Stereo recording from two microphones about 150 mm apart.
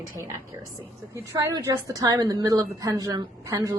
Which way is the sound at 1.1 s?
20° right (ahead or behind).